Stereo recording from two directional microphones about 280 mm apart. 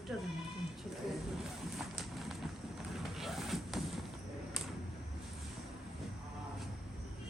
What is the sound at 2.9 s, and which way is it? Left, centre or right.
Music, centre.